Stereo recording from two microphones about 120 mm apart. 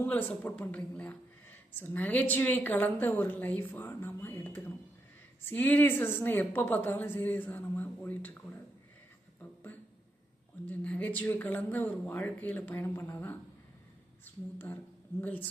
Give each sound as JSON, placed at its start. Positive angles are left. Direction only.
{"t": 0.0, "sound": "a woman's voice", "side_deg": 15}
{"t": 10.7, "sound": "a woman's voice", "side_deg": 15}